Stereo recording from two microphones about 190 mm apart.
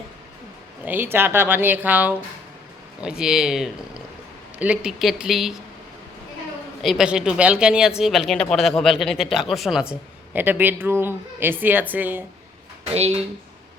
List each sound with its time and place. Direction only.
0.9 s a woman's voice: 10° right (ahead or behind)
6.8 s a woman's voice: 5° right (ahead or behind)
12.8 s speech: 35° right (ahead or behind)